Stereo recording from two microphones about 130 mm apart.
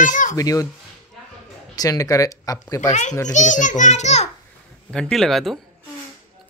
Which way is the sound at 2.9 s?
65° left (ahead or behind).